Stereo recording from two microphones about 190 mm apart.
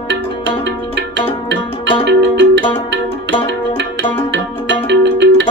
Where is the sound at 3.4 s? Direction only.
70° right (ahead or behind).